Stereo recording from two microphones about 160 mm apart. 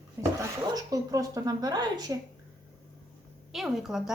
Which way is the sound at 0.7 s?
20° right (ahead or behind).